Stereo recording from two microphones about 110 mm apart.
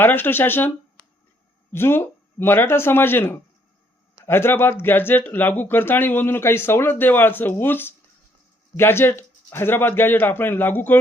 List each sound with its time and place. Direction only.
0.0 s speech: 20° left (ahead or behind)
1.7 s speech: 20° left (ahead or behind)